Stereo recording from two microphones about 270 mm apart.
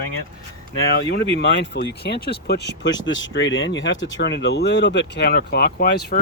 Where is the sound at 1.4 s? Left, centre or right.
Left.